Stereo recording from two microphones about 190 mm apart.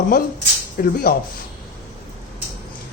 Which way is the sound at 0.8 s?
50° left (ahead or behind).